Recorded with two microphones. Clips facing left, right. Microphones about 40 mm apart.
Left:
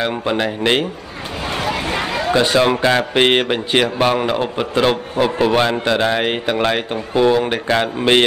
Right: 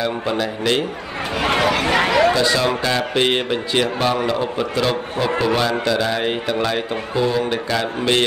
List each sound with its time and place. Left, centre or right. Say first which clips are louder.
0.0 s a man's voice: left 2 dB; left
1.4 s a sound: right 4 dB; right
2.3 s a man's voice: left 3 dB; left